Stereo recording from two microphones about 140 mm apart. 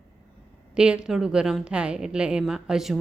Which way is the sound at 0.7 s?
5° right (ahead or behind).